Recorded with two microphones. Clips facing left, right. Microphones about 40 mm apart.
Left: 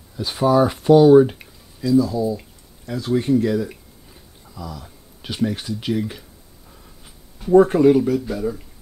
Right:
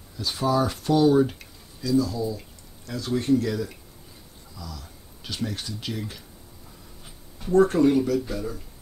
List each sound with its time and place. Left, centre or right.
0.2 s speech: left
7.5 s speech: left